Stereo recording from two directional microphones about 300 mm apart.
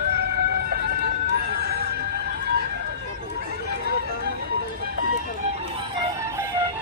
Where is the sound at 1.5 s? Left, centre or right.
Right.